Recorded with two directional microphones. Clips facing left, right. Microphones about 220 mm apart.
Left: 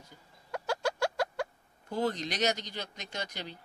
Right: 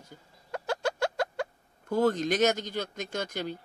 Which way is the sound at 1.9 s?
50° right (ahead or behind).